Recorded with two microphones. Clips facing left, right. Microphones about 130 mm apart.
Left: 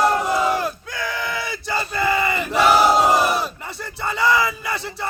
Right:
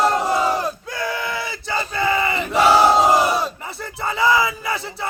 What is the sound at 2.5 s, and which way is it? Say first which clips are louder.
Crowd: right 2 dB; 30° right (ahead or behind).